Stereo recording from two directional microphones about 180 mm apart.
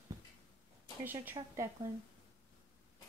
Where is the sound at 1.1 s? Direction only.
15° right (ahead or behind).